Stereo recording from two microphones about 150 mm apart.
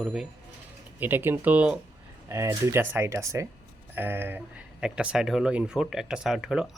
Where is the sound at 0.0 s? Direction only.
5° right (ahead or behind).